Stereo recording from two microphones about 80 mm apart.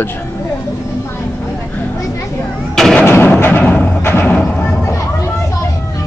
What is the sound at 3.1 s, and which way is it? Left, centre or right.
Music, left.